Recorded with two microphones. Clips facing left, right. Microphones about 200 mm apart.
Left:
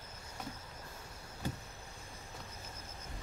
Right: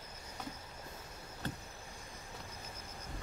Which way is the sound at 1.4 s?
10° left (ahead or behind).